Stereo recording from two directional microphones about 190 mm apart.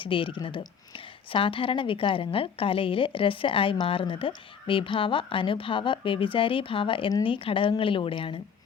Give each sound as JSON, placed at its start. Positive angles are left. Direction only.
{"t": 0.0, "sound": "a woman's voice", "side_deg": 25}